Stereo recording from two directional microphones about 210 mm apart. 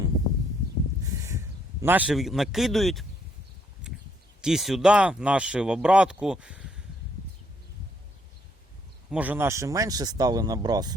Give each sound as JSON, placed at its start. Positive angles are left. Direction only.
{"t": 1.0, "sound": "a sound", "side_deg": -15}
{"t": 4.4, "sound": "speech", "side_deg": 0}
{"t": 9.0, "sound": "speech", "side_deg": -5}